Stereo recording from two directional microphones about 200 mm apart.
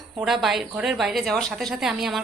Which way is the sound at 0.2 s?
Centre (ahead or behind).